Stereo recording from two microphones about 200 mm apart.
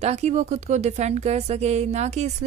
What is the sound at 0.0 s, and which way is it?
Speech, 35° right (ahead or behind).